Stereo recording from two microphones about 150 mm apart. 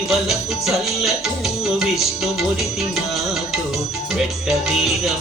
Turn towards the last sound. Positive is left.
turn(degrees=0)  # may be behind; listen again after turning